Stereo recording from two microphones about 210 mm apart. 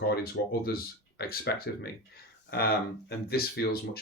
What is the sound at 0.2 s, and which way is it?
Speech, 45° left (ahead or behind).